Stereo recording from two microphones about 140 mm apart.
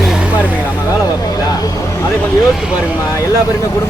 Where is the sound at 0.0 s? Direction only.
5° right (ahead or behind).